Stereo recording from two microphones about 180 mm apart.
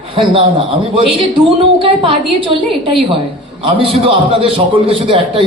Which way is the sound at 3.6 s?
30° right (ahead or behind).